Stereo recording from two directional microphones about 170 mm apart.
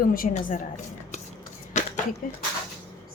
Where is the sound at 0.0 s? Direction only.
55° left (ahead or behind).